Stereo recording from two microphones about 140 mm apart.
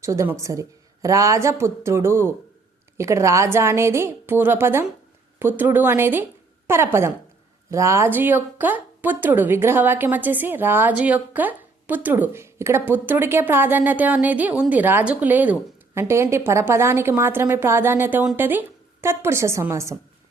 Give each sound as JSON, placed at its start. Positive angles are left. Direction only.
{"t": 0.0, "sound": "a woman's voice", "side_deg": -20}